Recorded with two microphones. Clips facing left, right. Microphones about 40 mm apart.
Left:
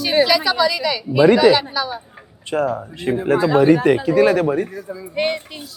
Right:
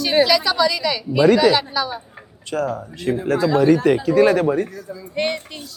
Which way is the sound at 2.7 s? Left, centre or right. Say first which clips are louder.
Left 1 dB; left.